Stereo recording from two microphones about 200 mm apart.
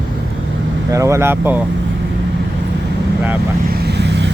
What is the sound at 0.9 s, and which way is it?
Speech, 15° right (ahead or behind).